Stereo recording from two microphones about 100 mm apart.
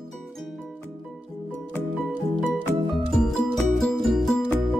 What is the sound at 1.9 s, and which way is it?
Music, 15° right (ahead or behind).